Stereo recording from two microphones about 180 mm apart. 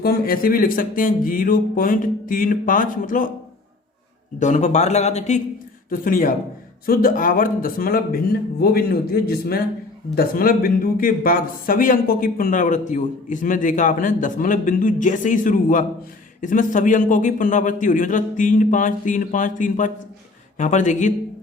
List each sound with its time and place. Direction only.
0.0 s speech: 55° left (ahead or behind)
4.4 s speech: 40° left (ahead or behind)
5.9 s speech: 50° left (ahead or behind)